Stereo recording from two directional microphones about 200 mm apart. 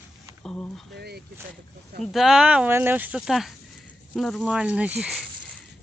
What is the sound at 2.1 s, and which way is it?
Speech, centre (ahead or behind).